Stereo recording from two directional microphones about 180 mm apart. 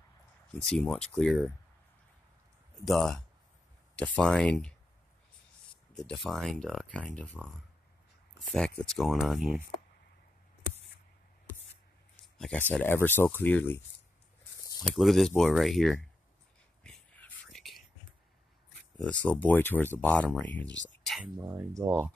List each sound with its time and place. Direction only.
0.7 s speech: 5° left (ahead or behind)
2.8 s speech: centre (ahead or behind)
5.9 s speech: centre (ahead or behind)
12.4 s speech: 5° left (ahead or behind)
16.8 s whispering: 5° left (ahead or behind)
19.2 s speech: 10° left (ahead or behind)
20.6 s speech: 90° left
21.0 s a sound: centre (ahead or behind)
21.4 s speech: 15° right (ahead or behind)